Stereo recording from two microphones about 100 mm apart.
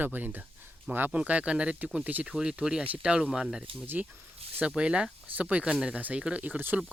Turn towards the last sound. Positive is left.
turn(degrees=-15)  # may be behind; listen again after turning